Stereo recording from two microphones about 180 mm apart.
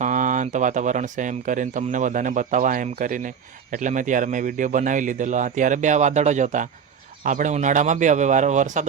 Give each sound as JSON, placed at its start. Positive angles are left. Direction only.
{"t": 0.0, "sound": "speech", "side_deg": -45}